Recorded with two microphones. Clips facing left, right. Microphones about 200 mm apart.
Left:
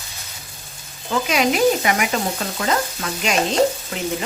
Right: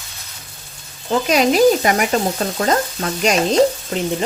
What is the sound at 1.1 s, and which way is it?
Frying, 35° right (ahead or behind).